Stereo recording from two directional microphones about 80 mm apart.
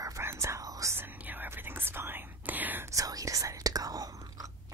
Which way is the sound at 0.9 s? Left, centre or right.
Right.